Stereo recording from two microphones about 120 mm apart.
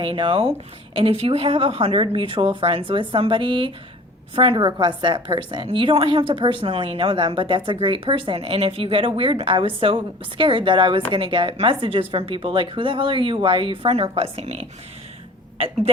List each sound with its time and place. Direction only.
0.0 s a woman's voice: 45° right (ahead or behind)